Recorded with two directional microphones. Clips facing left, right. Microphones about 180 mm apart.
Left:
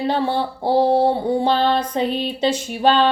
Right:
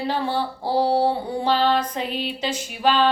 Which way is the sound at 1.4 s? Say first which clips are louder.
Right 2 dB; 30° left (ahead or behind).